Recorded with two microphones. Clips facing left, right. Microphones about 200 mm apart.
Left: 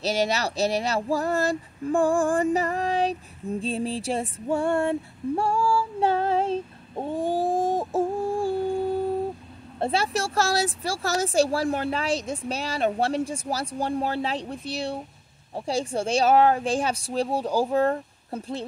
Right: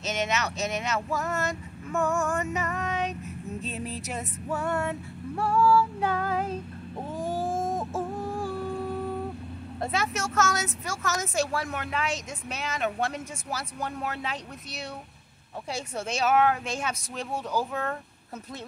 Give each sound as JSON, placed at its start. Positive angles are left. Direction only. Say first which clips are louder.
{"t": 0.0, "sound": "speech", "louder": "left 5 dB", "side_deg": 35}